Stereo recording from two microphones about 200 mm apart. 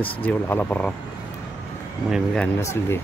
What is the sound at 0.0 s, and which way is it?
Speech, 10° left (ahead or behind).